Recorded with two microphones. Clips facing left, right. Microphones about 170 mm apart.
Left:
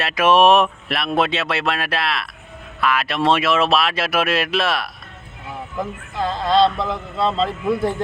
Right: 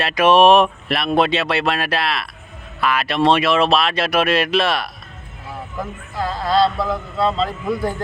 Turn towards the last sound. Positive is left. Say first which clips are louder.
# left 2 dB
turn(degrees=0)  # may be behind; listen again after turning